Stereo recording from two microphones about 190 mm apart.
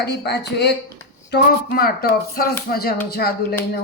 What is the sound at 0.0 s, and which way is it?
Speech, 60° left (ahead or behind).